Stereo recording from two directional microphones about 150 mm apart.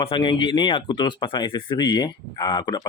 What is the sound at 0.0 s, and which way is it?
Speech, 35° left (ahead or behind).